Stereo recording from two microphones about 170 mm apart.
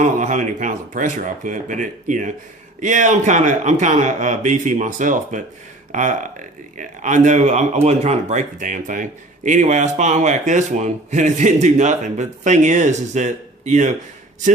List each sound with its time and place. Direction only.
0.0 s speech: 45° right (ahead or behind)